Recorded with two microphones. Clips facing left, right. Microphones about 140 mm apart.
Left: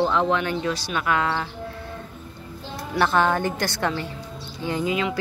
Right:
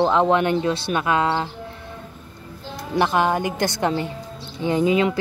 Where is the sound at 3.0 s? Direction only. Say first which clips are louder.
Right 1 dB; 15° right (ahead or behind).